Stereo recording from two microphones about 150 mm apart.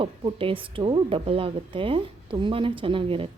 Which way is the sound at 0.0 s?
35° right (ahead or behind).